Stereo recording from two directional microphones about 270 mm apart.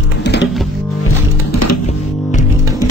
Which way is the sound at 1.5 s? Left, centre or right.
Left.